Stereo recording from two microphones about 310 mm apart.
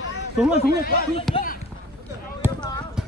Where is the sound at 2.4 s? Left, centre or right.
Centre.